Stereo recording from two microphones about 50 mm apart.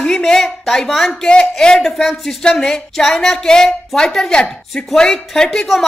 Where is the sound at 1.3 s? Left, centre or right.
Centre.